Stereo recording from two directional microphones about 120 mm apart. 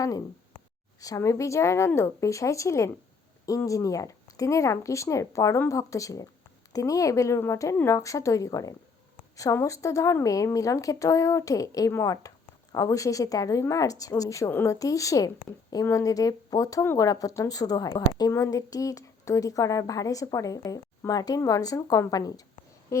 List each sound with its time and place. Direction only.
1.0 s a woman's voice: 25° left (ahead or behind)
18.3 s a woman's voice: 25° left (ahead or behind)
22.9 s a sound: 25° left (ahead or behind)